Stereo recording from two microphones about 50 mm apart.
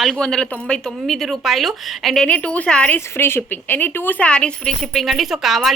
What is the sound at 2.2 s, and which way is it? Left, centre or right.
Speech, left.